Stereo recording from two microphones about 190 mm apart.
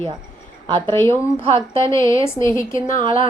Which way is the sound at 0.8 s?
10° left (ahead or behind).